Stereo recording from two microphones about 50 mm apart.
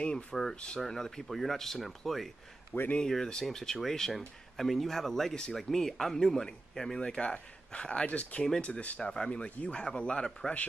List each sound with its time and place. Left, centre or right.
0.0 s speech: centre
3.0 s speech: centre